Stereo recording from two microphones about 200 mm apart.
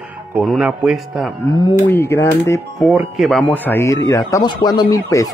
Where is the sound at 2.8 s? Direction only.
Centre (ahead or behind).